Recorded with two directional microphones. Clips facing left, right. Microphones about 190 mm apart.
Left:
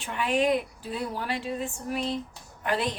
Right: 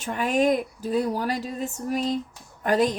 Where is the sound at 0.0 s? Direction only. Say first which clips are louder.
Right 3 dB; 40° right (ahead or behind).